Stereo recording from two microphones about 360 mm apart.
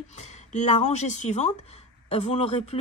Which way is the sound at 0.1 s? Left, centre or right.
Centre.